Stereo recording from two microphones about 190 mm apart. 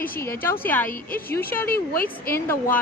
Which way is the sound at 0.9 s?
50° left (ahead or behind).